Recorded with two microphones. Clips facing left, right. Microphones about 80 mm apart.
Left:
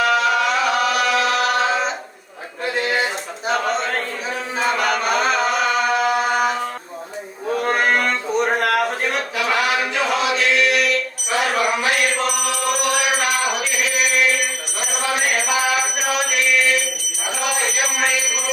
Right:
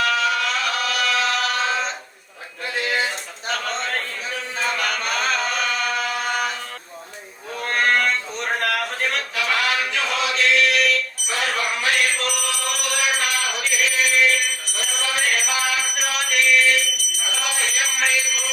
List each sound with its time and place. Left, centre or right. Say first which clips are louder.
0.0 s chant: left 4 dB; centre
2.8 s a sound: even; centre
4.5 s chant: left 5 dB; centre
7.6 s a sound: left 1 dB; centre
9.5 s chant: left 3 dB; centre
9.9 s choir: left 4 dB; centre
11.3 s mantra: left 5 dB; centre